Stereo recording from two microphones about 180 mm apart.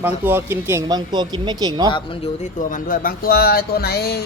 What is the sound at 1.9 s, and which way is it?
Speech, 30° left (ahead or behind).